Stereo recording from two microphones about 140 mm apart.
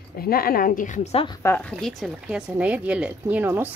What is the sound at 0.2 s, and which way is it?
Speech, 90° left.